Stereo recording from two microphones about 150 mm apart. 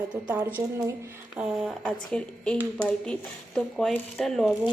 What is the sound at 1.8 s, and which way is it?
A woman's voice, 5° left (ahead or behind).